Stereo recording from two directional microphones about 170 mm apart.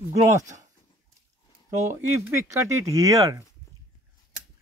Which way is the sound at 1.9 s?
15° right (ahead or behind).